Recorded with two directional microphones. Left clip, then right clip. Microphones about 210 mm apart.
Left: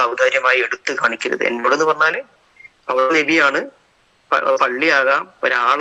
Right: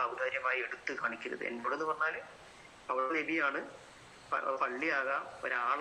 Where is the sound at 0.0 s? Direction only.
50° left (ahead or behind).